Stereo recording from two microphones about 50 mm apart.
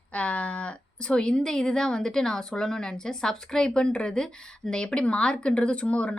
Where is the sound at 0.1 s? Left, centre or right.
Left.